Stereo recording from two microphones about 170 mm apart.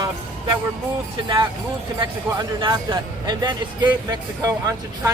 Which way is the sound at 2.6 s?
25° right (ahead or behind).